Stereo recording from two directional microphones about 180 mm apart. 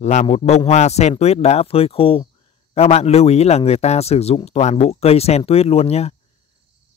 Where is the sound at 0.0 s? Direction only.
40° left (ahead or behind).